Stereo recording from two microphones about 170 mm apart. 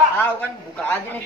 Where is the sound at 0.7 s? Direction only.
10° left (ahead or behind).